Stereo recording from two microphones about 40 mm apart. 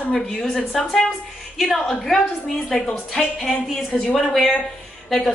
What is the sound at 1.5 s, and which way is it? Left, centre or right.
Speech, centre.